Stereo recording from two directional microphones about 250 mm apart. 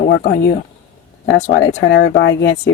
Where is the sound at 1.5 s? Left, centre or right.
Left.